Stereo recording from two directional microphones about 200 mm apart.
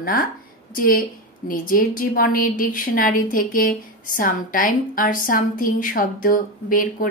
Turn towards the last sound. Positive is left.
turn(degrees=45)  # may be behind; listen again after turning